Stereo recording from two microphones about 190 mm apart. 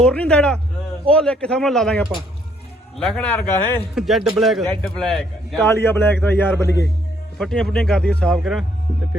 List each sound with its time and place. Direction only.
0.0 s a man's voice: 5° left (ahead or behind)
7.3 s a man's voice: centre (ahead or behind)